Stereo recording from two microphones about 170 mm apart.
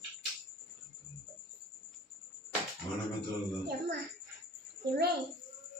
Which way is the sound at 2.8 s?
20° left (ahead or behind).